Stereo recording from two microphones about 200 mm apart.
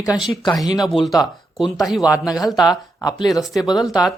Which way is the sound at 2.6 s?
20° left (ahead or behind).